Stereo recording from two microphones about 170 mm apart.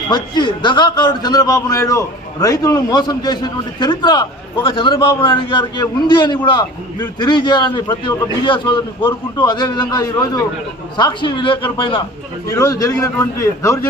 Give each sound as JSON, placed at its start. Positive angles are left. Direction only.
{"t": 0.1, "sound": "a man's voice", "side_deg": 25}
{"t": 12.5, "sound": "a man's voice", "side_deg": 20}